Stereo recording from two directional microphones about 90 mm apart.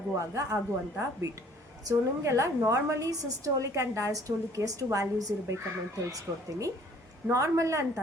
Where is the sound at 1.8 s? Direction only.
35° right (ahead or behind).